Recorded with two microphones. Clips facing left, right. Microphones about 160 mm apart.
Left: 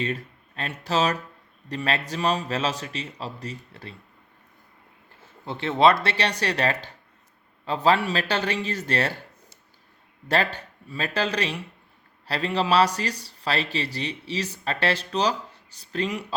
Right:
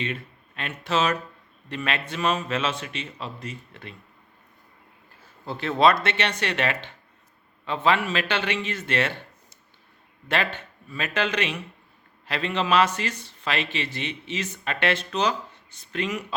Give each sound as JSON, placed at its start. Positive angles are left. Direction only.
{"t": 0.0, "sound": "a man's voice", "side_deg": 40}
{"t": 5.5, "sound": "a man's voice", "side_deg": 25}
{"t": 10.2, "sound": "a man's voice", "side_deg": 40}